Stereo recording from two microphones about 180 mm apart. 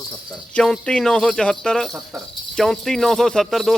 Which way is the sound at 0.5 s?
5° left (ahead or behind).